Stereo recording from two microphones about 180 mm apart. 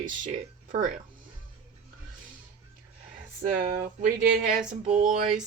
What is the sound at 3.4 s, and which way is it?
Speech, 50° right (ahead or behind).